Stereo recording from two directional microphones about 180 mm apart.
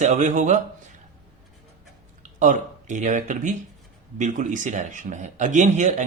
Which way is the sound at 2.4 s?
40° right (ahead or behind).